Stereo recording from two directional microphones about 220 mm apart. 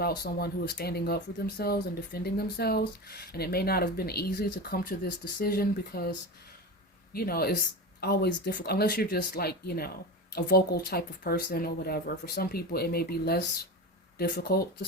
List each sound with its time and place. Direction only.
0.0 s speech: 45° left (ahead or behind)